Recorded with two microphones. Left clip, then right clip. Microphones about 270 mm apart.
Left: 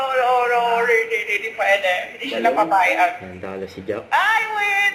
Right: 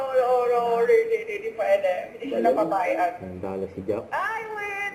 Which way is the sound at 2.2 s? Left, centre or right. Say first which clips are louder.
Left 2 dB; centre.